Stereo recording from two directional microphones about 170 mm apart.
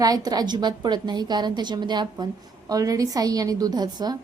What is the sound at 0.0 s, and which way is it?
A woman's voice, 20° right (ahead or behind).